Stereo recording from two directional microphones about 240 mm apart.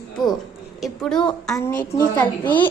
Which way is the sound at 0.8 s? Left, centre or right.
Centre.